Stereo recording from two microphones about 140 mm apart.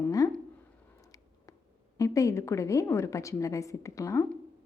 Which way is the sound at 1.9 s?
25° left (ahead or behind).